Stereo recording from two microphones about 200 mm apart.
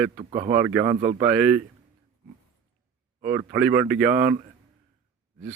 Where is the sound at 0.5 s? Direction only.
10° right (ahead or behind).